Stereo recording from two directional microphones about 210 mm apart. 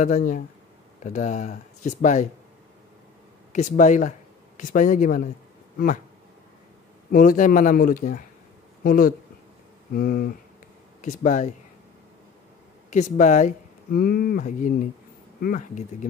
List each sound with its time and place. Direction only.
0.0 s speech: 35° left (ahead or behind)
3.5 s speech: 35° left (ahead or behind)
7.1 s speech: 40° left (ahead or behind)
12.9 s speech: 35° left (ahead or behind)